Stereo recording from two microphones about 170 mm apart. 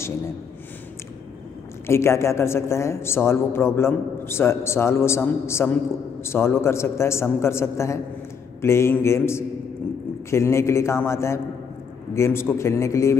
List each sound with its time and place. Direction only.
1.9 s a man's voice: 15° left (ahead or behind)